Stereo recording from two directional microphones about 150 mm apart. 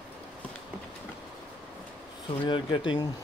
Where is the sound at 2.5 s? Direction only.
30° left (ahead or behind).